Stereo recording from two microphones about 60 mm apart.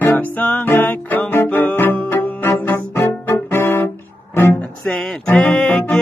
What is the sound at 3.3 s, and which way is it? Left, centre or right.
Brass instrument, left.